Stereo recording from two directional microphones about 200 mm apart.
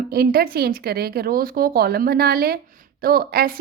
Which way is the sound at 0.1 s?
50° right (ahead or behind).